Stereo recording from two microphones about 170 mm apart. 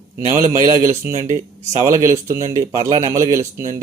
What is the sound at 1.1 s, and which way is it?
Speech, 50° right (ahead or behind).